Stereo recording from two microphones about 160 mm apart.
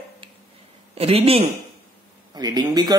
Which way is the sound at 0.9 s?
40° right (ahead or behind).